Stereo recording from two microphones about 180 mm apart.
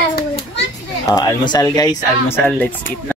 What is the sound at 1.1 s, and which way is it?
Speech, 20° left (ahead or behind).